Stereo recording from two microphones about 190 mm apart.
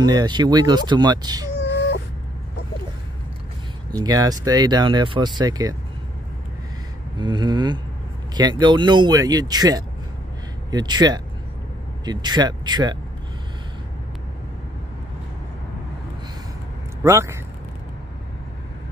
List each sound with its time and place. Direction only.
0.0 s speech: 20° right (ahead or behind)
4.0 s speech: 20° right (ahead or behind)
7.2 s speech: 25° right (ahead or behind)
17.0 s speech: 15° right (ahead or behind)